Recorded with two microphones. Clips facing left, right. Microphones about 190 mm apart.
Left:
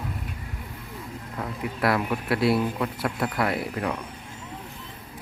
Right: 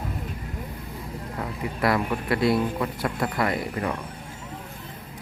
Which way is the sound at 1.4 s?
Centre (ahead or behind).